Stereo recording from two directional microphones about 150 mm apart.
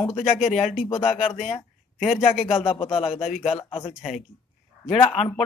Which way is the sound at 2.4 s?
40° left (ahead or behind).